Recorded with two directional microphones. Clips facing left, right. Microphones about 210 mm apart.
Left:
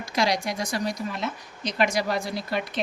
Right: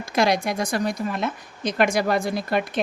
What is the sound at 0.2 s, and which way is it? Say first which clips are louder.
A woman's voice: right 4 dB; 55° right (ahead or behind).